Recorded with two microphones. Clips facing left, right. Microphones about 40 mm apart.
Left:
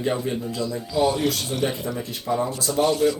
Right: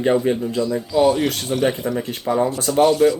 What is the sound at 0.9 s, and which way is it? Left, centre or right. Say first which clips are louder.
Speech: right 5 dB; centre.